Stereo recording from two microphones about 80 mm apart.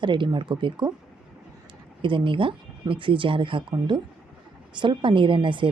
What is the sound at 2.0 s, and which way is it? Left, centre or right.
Speech, right.